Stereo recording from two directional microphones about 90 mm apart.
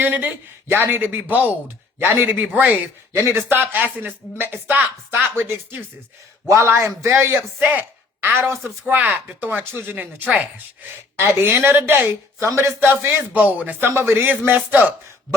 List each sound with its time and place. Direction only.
0.0 s a man's voice: 15° right (ahead or behind)
3.1 s a man's voice: 30° right (ahead or behind)